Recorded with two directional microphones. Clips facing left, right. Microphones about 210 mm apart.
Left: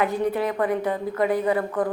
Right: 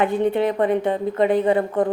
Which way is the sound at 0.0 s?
25° right (ahead or behind).